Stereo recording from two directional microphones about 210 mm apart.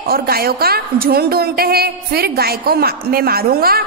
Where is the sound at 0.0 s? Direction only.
45° right (ahead or behind).